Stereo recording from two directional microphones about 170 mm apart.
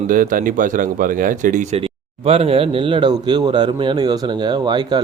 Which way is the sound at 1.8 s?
35° right (ahead or behind).